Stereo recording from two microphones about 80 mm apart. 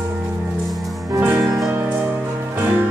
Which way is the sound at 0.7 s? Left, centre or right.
Centre.